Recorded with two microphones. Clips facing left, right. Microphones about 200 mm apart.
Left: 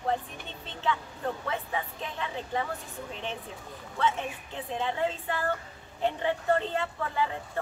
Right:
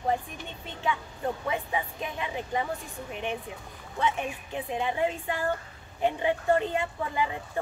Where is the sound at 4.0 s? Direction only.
15° right (ahead or behind).